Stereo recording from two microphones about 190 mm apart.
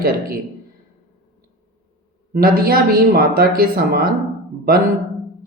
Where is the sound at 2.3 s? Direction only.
50° right (ahead or behind).